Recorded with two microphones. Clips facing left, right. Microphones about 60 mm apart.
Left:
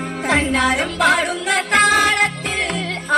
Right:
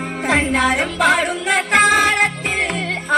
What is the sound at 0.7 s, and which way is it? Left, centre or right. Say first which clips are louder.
Music: right 1 dB; centre.